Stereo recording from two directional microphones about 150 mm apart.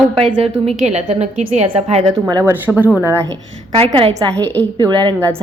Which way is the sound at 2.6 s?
10° right (ahead or behind).